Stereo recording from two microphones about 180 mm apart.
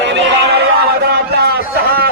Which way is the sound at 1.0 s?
60° right (ahead or behind).